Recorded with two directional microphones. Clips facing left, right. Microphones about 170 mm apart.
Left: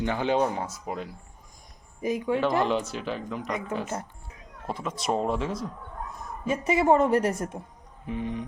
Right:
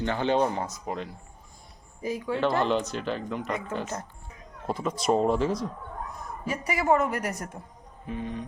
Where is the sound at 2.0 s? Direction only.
20° left (ahead or behind).